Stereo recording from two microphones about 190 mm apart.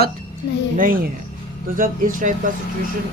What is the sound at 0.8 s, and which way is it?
Speech, 50° right (ahead or behind).